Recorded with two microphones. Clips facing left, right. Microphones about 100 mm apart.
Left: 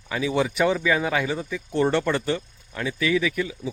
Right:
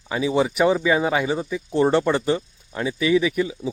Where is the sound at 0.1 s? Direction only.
20° right (ahead or behind).